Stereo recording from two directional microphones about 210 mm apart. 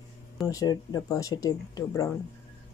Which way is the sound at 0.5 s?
15° left (ahead or behind).